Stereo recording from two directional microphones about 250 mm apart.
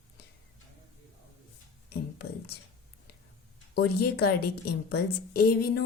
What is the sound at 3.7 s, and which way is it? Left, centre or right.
A woman's voice, left.